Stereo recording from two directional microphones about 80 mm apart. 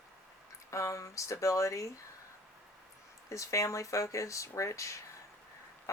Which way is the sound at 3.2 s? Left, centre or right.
Left.